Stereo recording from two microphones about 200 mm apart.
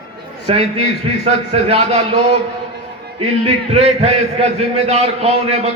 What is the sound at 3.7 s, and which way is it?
A man's voice, 30° right (ahead or behind).